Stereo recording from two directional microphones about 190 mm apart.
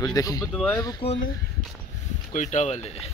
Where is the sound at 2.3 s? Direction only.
40° left (ahead or behind).